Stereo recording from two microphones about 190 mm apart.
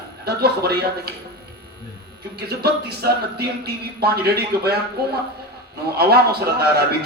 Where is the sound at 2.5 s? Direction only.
55° right (ahead or behind).